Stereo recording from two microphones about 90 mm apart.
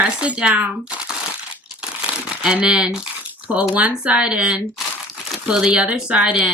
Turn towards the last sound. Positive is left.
turn(degrees=-10)  # may be behind; listen again after turning